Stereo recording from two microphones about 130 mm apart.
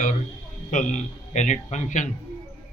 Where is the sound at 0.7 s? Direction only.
80° left.